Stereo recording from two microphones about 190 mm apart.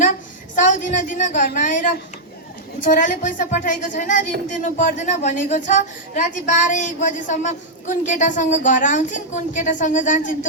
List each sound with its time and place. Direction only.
0.5 s a woman's voice: 40° left (ahead or behind)